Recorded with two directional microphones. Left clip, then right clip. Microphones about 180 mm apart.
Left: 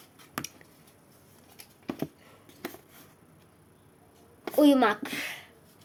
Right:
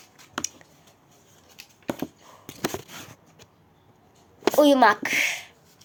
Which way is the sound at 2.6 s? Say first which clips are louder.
Right 11 dB; 60° right (ahead or behind).